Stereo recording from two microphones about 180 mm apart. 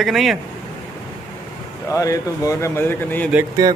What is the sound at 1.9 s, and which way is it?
Speech, 20° left (ahead or behind).